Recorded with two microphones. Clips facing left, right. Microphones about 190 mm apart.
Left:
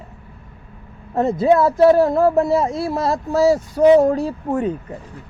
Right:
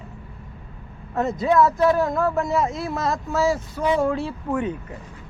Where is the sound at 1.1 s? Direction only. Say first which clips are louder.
Left 4 dB; 30° left (ahead or behind).